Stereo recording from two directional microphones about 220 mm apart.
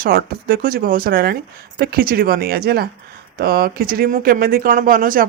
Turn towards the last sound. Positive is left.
turn(degrees=-40)  # may be behind; listen again after turning